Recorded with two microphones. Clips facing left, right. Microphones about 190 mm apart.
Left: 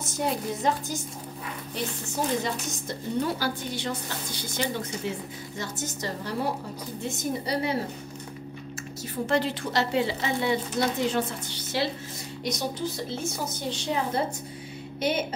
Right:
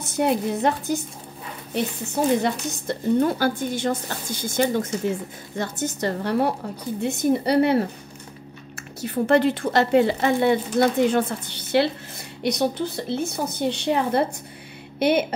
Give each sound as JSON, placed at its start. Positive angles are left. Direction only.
{"t": 0.0, "sound": "speech", "side_deg": -60}
{"t": 2.4, "sound": "a woman's voice", "side_deg": -55}
{"t": 5.6, "sound": "speech", "side_deg": -60}
{"t": 9.0, "sound": "a woman's voice", "side_deg": -60}